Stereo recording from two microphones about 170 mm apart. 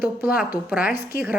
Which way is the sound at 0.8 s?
60° left (ahead or behind).